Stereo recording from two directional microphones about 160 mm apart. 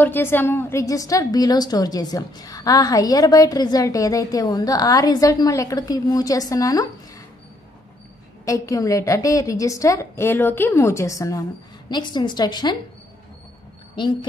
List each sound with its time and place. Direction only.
0.0 s a woman's voice: 15° left (ahead or behind)
8.5 s a woman's voice: 20° left (ahead or behind)
14.0 s a woman's voice: 30° left (ahead or behind)